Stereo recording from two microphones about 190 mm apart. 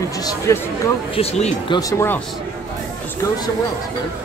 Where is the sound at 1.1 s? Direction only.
30° left (ahead or behind).